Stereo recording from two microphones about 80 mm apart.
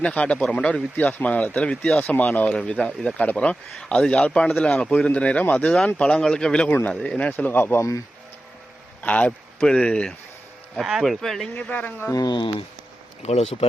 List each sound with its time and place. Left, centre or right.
0.0 s a man's voice: centre
2.0 s a man's voice: left
9.0 s a man's voice: centre
10.8 s speech: centre
11.5 s speech: centre
12.1 s speech: left